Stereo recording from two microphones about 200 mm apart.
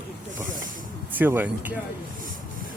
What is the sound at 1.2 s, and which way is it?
Speech, 10° right (ahead or behind).